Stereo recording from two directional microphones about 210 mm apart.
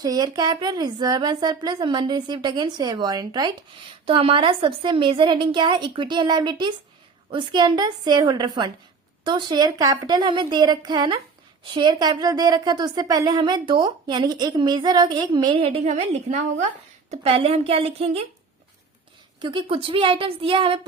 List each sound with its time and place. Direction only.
0.0 s speech: 20° right (ahead or behind)
19.4 s speech: 25° right (ahead or behind)